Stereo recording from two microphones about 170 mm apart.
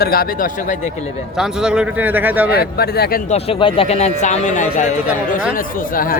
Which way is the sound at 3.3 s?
30° left (ahead or behind).